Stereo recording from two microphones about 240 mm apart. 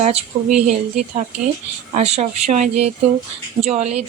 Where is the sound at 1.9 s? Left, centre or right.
Right.